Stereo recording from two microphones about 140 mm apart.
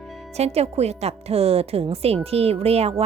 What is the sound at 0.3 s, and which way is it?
A woman's voice, 50° right (ahead or behind).